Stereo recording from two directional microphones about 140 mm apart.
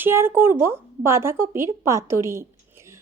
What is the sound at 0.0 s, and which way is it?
A woman's voice, 15° right (ahead or behind).